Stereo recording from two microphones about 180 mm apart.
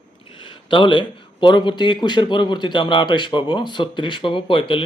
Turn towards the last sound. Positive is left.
turn(degrees=30)  # may be behind; listen again after turning